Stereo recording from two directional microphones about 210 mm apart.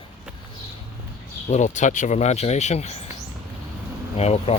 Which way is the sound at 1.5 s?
35° left (ahead or behind).